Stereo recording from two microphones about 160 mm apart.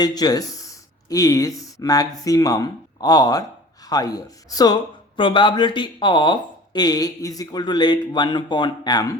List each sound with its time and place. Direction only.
0.0 s speech: 25° left (ahead or behind)